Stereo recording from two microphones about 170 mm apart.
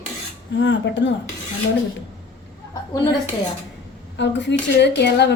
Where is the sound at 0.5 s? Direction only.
90° left.